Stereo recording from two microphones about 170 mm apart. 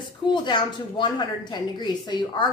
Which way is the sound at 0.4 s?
25° left (ahead or behind).